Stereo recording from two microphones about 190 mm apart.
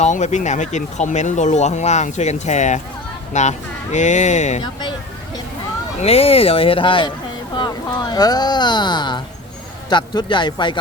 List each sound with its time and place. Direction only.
0.0 s speech: 40° left (ahead or behind)
4.6 s speech: 25° left (ahead or behind)
6.0 s speech: 30° left (ahead or behind)